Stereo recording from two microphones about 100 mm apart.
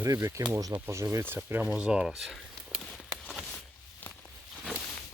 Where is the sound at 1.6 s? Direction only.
10° right (ahead or behind).